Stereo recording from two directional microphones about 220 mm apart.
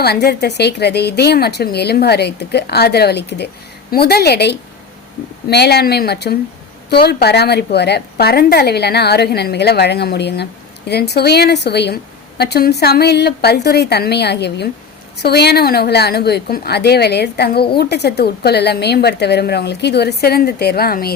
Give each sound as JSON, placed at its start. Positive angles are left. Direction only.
{"t": 0.0, "sound": "a woman's voice", "side_deg": 45}